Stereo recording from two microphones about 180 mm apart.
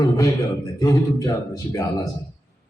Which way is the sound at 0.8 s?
20° left (ahead or behind).